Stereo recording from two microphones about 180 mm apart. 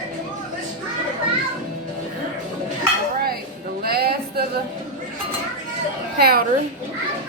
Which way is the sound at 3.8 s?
60° right (ahead or behind).